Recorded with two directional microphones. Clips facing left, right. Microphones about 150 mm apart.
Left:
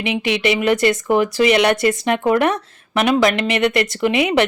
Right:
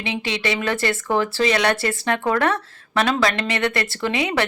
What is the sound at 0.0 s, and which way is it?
A woman's voice, 20° left (ahead or behind).